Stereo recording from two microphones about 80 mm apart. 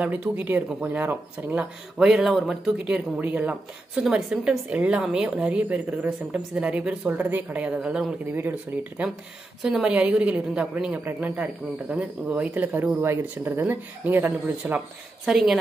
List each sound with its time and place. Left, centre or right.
0.0 s a woman's voice: centre
2.9 s speech: right
3.9 s a woman's voice: centre
8.4 s speech: right
9.6 s a woman's voice: centre; by 12.8 s right
12.8 s speech: right
15.2 s speech: centre